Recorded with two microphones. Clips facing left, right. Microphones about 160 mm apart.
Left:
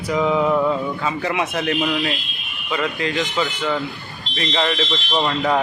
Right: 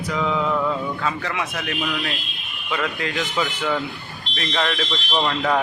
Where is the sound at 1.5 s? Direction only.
35° left (ahead or behind).